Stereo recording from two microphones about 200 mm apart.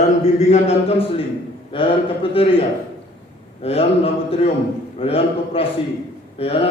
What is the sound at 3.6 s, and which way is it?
Speech, 30° left (ahead or behind).